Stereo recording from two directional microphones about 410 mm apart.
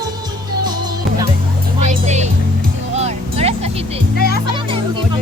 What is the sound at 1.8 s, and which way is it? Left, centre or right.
Music, centre.